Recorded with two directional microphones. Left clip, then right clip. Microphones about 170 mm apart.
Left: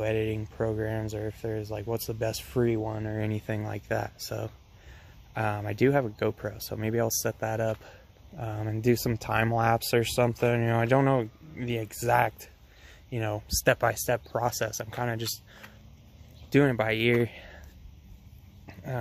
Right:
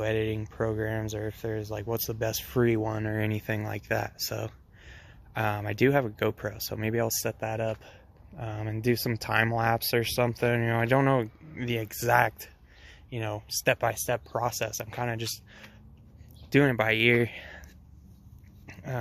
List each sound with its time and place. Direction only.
0.0 s speech: 5° left (ahead or behind); by 3.3 s 10° right (ahead or behind)
3.3 s speech: 5° left (ahead or behind)
12.8 s speech: 25° left (ahead or behind); by 17.6 s 5° left (ahead or behind)
18.7 s a sound: 10° left (ahead or behind)